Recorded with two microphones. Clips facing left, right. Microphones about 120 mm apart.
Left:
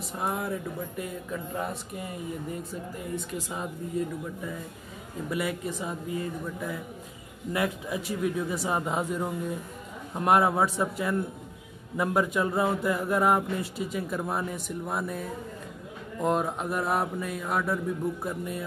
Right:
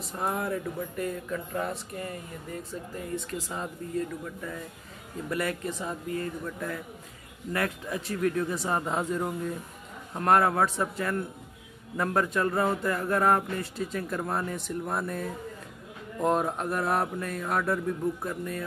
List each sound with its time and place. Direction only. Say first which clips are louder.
0.2 s a man's voice: right 1 dB; 5° left (ahead or behind)
3.3 s a man's voice: even; 10° left (ahead or behind)
16.2 s mantra: right 1 dB; centre (ahead or behind)
18.2 s a man's voice: left 1 dB; 10° left (ahead or behind)